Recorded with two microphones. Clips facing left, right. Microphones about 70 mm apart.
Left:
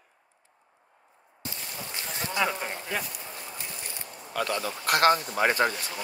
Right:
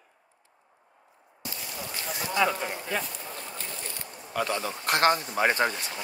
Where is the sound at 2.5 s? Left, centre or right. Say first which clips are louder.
Right 2 dB; left.